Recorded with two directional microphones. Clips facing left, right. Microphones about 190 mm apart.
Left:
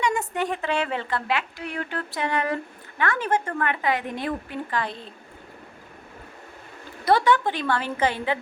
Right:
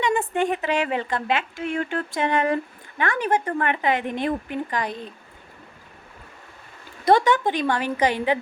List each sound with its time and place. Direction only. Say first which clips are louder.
0.0 s a woman's voice: right 3 dB; 25° right (ahead or behind)
7.0 s a woman's voice: right 2 dB; 20° right (ahead or behind)